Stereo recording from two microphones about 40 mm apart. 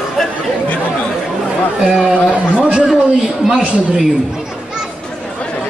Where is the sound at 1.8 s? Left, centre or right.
Right.